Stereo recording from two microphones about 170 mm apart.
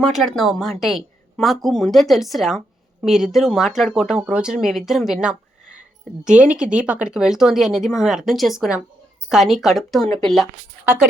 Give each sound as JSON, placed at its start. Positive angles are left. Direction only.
{"t": 0.0, "sound": "speech", "side_deg": 0}